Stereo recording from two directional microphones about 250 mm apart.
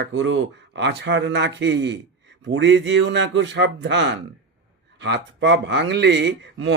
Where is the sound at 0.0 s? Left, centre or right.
Right.